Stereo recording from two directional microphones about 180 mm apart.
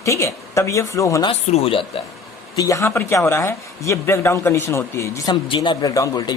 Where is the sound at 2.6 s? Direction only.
15° left (ahead or behind).